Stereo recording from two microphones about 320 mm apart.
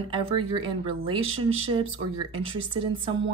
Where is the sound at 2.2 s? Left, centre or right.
Centre.